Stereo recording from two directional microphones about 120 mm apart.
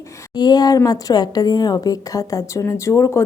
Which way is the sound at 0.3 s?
35° left (ahead or behind).